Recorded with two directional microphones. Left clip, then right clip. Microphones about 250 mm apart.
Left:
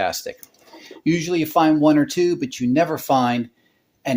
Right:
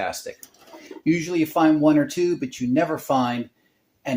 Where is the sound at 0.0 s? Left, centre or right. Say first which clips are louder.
Left 5 dB; left.